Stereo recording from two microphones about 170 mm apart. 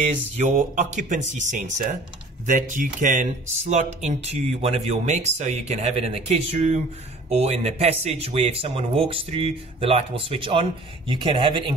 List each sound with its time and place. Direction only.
0.0 s speech: 45° right (ahead or behind); by 11.7 s 30° right (ahead or behind)